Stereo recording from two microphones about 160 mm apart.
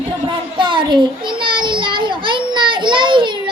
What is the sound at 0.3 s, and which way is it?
Child singing, 30° right (ahead or behind).